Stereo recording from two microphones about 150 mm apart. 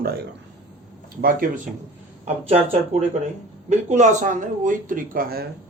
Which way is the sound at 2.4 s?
40° right (ahead or behind).